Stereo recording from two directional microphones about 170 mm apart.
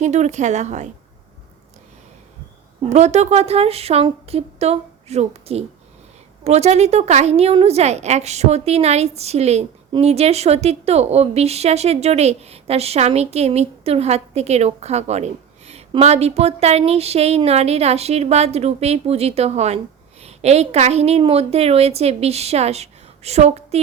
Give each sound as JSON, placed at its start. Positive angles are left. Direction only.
{"t": 0.0, "sound": "speech", "side_deg": -45}
{"t": 2.9, "sound": "a woman's voice", "side_deg": -40}